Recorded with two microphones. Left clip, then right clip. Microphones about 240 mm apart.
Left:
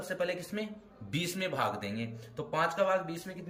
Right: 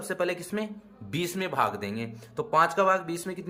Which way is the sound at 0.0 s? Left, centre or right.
Centre.